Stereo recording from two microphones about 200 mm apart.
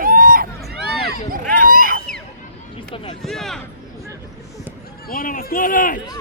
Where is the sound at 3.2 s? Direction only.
Centre (ahead or behind).